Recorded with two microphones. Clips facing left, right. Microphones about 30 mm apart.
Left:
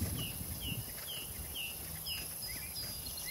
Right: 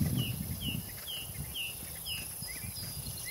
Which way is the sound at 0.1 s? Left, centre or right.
Centre.